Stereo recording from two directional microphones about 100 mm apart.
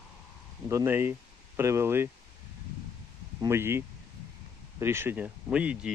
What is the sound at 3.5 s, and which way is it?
Speech, 25° right (ahead or behind).